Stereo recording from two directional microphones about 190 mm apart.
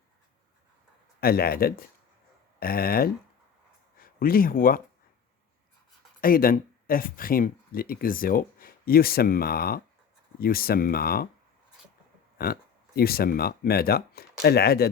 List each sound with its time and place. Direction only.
1.2 s speech: 55° left (ahead or behind)
6.2 s speech: 50° left (ahead or behind)
12.4 s speech: 50° left (ahead or behind)